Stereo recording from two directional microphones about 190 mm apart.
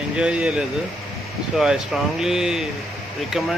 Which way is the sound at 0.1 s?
5° right (ahead or behind).